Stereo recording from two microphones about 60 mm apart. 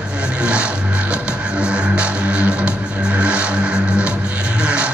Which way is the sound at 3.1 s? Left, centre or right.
Centre.